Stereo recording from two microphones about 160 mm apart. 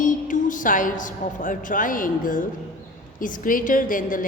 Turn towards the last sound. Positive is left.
turn(degrees=55)  # may be behind; listen again after turning